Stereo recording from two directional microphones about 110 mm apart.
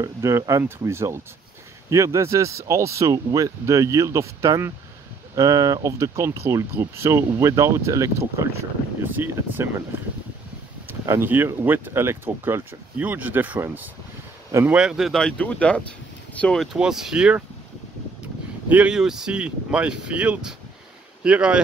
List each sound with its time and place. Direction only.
0.0 s speech: 25° right (ahead or behind)
10.9 s speech: 20° right (ahead or behind); by 16.6 s 10° left (ahead or behind)
16.7 s speech: 5° right (ahead or behind)
18.7 s speech: 10° right (ahead or behind)